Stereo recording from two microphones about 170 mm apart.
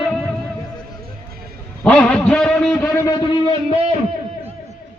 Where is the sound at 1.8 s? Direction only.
5° left (ahead or behind).